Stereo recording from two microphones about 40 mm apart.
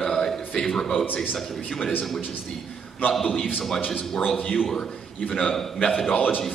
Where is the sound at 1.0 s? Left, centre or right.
Left.